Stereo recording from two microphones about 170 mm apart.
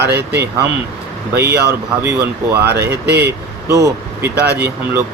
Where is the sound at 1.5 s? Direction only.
15° right (ahead or behind).